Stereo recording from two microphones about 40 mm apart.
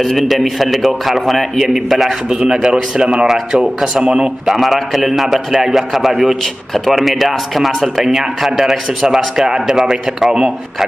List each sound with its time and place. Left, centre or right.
0.0 s a man's voice: centre
2.2 s a man's voice: centre
4.5 s a man's voice: centre
6.4 s a man's voice: centre